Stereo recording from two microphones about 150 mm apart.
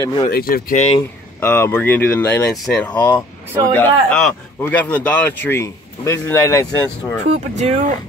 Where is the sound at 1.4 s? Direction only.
15° left (ahead or behind).